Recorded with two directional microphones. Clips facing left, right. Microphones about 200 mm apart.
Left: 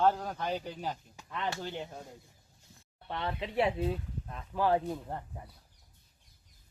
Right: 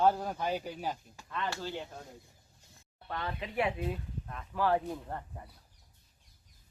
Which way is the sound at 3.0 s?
25° left (ahead or behind).